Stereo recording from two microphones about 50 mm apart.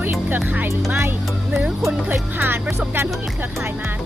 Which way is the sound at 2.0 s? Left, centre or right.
Right.